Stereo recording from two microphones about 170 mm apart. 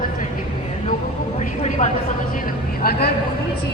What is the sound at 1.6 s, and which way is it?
Speech, 45° left (ahead or behind).